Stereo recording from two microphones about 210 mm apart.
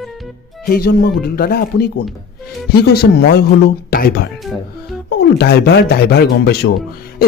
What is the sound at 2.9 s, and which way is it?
Speech, 50° left (ahead or behind).